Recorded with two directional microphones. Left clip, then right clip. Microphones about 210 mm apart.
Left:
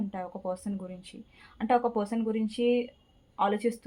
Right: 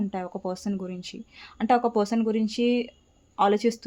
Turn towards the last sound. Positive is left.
turn(degrees=-50)  # may be behind; listen again after turning